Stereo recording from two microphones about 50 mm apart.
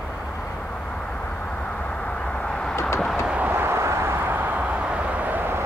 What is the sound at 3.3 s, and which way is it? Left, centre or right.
Vehicle, right.